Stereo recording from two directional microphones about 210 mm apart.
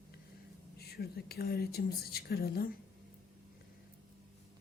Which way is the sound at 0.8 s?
50° left (ahead or behind).